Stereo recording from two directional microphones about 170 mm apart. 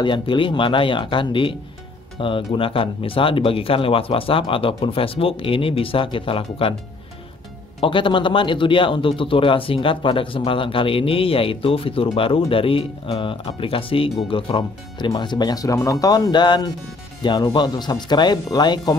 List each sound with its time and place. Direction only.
0.0 s speech: 30° left (ahead or behind)
7.8 s speech: 30° left (ahead or behind)